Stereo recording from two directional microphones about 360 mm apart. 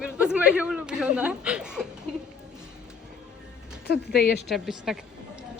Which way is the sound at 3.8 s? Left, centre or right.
Left.